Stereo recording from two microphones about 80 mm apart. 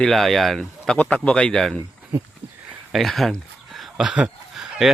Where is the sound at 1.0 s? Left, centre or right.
Centre.